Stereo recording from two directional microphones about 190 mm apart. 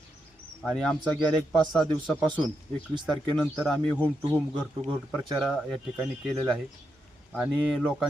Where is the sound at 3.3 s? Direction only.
5° left (ahead or behind).